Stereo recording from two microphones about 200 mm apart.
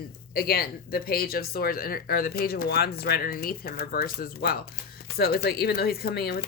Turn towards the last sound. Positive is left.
turn(degrees=50)  # may be behind; listen again after turning